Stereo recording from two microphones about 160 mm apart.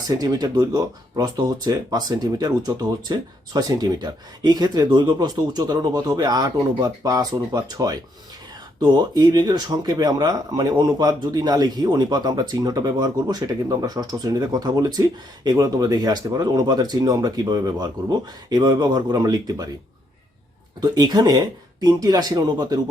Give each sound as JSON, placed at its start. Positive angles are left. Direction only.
{"t": 0.1, "sound": "speech", "side_deg": -25}
{"t": 20.8, "sound": "speech", "side_deg": -25}